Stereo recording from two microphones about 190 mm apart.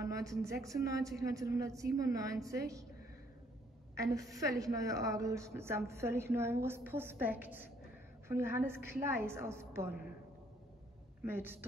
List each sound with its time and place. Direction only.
0.0 s a woman's voice: 15° right (ahead or behind)
3.9 s a woman's voice: 15° right (ahead or behind)
11.2 s a woman's voice: 10° right (ahead or behind)